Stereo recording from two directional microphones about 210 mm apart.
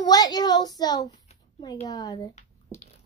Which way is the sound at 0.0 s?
20° left (ahead or behind).